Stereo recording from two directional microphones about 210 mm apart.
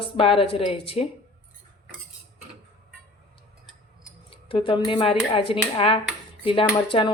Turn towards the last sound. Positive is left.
turn(degrees=25)  # may be behind; listen again after turning